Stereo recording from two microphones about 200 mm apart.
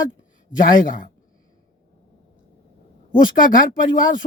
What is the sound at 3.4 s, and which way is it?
Speech, 40° left (ahead or behind).